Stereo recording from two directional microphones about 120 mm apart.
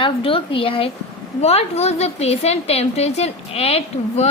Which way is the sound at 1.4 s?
60° left (ahead or behind).